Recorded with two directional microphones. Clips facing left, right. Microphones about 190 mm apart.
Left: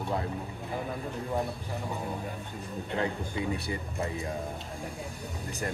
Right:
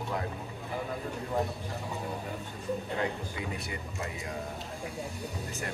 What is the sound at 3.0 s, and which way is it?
Speech, 30° left (ahead or behind).